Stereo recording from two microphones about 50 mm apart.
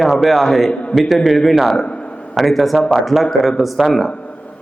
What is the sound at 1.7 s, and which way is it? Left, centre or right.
Speech, centre.